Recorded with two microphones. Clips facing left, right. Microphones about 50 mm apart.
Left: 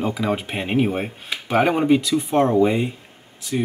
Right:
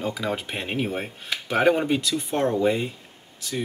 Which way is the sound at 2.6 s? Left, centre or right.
Centre.